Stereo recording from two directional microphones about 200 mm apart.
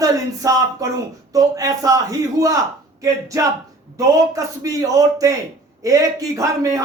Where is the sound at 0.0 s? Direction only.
15° right (ahead or behind).